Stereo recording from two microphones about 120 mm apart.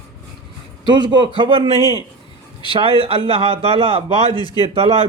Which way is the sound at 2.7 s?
45° right (ahead or behind).